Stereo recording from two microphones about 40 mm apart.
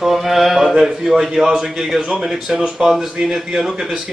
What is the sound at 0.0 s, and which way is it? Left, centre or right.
Speech, centre.